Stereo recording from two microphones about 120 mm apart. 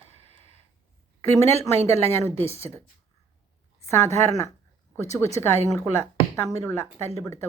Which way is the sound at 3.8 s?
25° left (ahead or behind).